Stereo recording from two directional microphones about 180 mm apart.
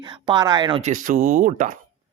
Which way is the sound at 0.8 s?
40° right (ahead or behind).